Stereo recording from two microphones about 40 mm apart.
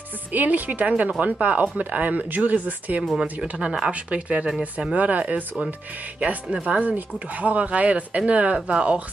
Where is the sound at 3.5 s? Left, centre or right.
Right.